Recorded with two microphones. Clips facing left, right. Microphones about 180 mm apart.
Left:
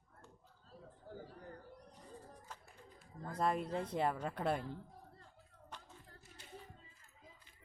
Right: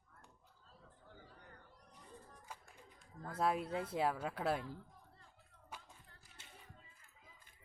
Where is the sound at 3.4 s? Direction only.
5° right (ahead or behind).